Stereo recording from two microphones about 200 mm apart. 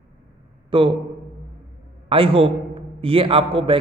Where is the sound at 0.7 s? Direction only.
25° right (ahead or behind).